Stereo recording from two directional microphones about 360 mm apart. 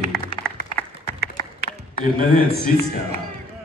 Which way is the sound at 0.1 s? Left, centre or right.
Centre.